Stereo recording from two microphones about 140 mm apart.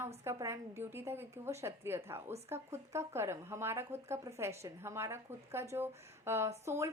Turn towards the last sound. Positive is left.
turn(degrees=-20)  # may be behind; listen again after turning